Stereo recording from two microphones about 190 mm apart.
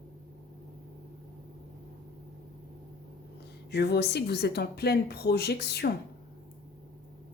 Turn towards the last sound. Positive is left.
turn(degrees=55)  # may be behind; listen again after turning